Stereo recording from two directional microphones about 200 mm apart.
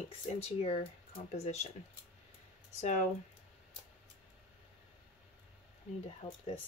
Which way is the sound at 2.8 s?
35° left (ahead or behind).